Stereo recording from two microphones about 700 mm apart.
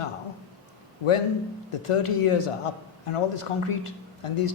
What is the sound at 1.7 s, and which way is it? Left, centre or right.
A man's voice, left.